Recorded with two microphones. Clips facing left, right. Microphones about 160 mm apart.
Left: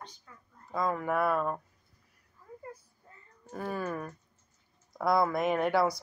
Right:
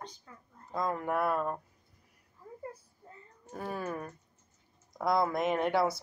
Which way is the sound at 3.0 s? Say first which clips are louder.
Right 5 dB; 25° right (ahead or behind).